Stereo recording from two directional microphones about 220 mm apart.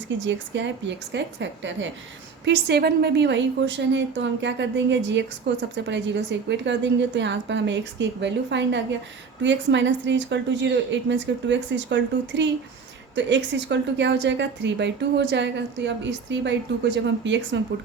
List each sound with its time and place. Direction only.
0.3 s a woman's voice: 55° right (ahead or behind)